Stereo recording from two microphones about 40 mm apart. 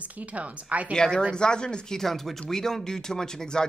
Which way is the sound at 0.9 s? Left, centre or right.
Centre.